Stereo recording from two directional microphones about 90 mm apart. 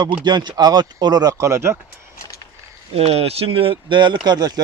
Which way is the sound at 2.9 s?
90° right.